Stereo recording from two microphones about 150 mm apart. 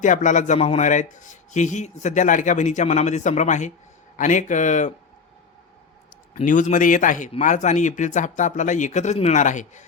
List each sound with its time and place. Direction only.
0.0 s a man's voice: 55° left (ahead or behind)
6.3 s a man's voice: 60° left (ahead or behind)